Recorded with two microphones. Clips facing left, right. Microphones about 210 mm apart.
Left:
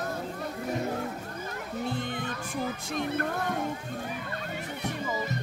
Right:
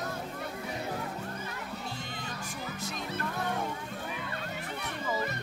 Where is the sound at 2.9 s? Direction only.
55° left (ahead or behind).